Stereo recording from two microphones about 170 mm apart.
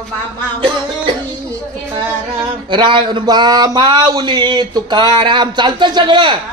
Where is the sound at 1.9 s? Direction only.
25° right (ahead or behind).